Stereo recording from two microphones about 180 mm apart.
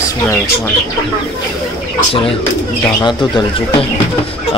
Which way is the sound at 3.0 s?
25° left (ahead or behind).